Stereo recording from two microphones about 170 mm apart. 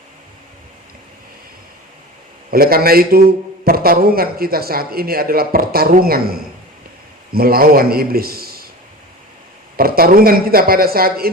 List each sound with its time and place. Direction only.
2.5 s a man's voice: 60° right (ahead or behind)
9.7 s a man's voice: 60° right (ahead or behind)